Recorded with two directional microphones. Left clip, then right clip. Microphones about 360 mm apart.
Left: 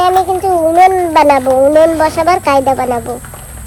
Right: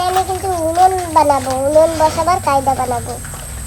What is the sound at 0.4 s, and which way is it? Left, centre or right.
Cat, left.